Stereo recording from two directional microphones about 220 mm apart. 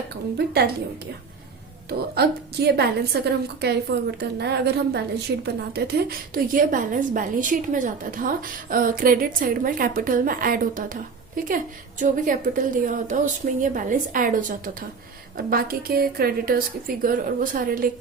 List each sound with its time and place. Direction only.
0.3 s a woman's voice: 45° right (ahead or behind)
1.9 s a woman's voice: 45° right (ahead or behind)